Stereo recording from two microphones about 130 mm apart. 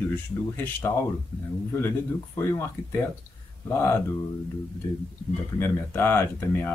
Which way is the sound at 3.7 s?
20° left (ahead or behind).